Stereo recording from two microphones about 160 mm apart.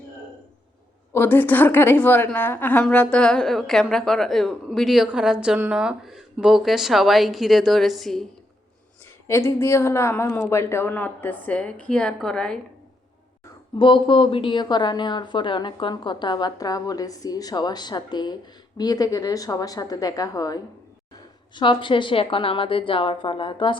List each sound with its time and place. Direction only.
1.1 s a woman's voice: 10° left (ahead or behind)
9.2 s a woman's voice: 15° left (ahead or behind)
13.7 s a woman's voice: 30° left (ahead or behind)